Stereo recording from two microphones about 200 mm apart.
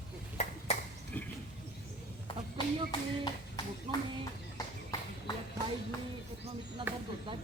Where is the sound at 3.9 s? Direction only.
25° right (ahead or behind).